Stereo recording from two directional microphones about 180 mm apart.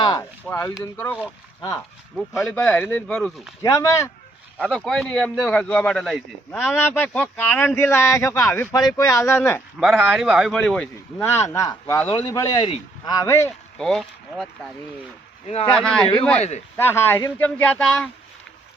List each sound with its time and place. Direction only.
0.0 s speech: 20° left (ahead or behind)
2.4 s speech: 10° left (ahead or behind)
3.6 s speech: 20° left (ahead or behind)
4.6 s a man's voice: 5° left (ahead or behind)
6.7 s speech: 10° left (ahead or behind)
9.8 s a man's voice: 10° right (ahead or behind); by 13.5 s 15° left (ahead or behind)
13.7 s a man's voice: centre (ahead or behind)
15.4 s speech: 35° left (ahead or behind)
15.7 s a man's voice: 5° left (ahead or behind)